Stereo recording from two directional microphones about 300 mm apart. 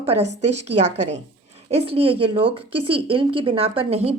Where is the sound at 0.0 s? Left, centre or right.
Centre.